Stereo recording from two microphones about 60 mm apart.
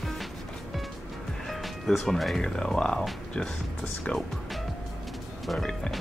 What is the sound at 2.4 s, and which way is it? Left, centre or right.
Speech, centre.